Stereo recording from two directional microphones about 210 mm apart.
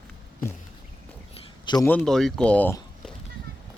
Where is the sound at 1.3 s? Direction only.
20° left (ahead or behind).